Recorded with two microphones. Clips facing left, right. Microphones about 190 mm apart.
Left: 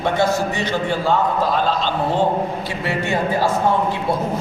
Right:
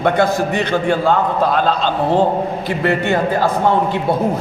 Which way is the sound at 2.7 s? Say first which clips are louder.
Right 6 dB; 60° right (ahead or behind).